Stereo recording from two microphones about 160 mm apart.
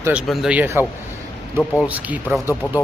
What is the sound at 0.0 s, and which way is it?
Speech, 10° right (ahead or behind).